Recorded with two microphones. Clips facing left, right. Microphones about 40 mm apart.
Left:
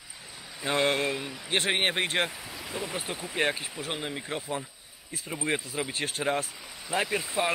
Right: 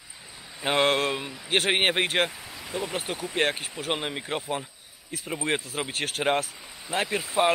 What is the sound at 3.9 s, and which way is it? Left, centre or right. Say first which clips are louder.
Speech: right 3 dB; right.